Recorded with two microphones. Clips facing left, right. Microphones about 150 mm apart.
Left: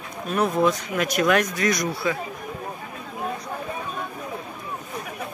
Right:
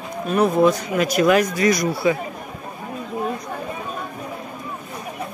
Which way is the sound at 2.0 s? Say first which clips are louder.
Right 7 dB; 15° right (ahead or behind).